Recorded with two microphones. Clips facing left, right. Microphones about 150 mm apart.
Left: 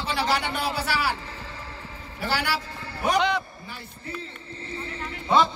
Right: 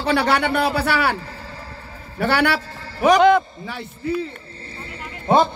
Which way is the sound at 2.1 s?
65° right (ahead or behind).